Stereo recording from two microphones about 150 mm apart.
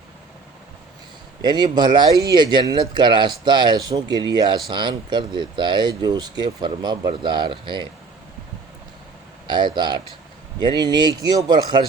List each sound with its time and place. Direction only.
1.4 s speech: 30° right (ahead or behind)
9.5 s speech: 30° right (ahead or behind)